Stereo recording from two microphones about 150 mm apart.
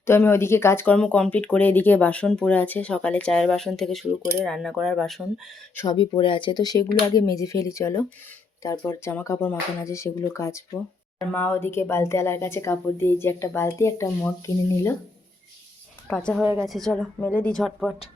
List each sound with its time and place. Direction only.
0.0 s speech: 15° left (ahead or behind)
5.7 s speech: 25° left (ahead or behind)
16.0 s speech: 5° left (ahead or behind)
16.4 s speech: 15° right (ahead or behind)
16.6 s speech: centre (ahead or behind)
17.6 s speech: centre (ahead or behind)